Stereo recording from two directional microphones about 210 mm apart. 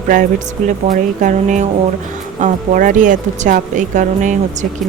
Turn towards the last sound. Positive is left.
turn(degrees=-35)  # may be behind; listen again after turning